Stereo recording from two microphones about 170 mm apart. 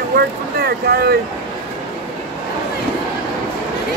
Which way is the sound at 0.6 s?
70° right (ahead or behind).